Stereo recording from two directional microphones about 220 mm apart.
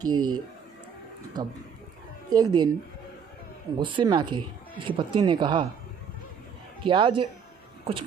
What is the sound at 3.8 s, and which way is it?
Speech, 20° right (ahead or behind).